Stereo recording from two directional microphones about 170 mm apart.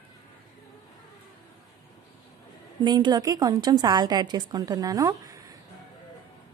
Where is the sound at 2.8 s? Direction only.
25° right (ahead or behind).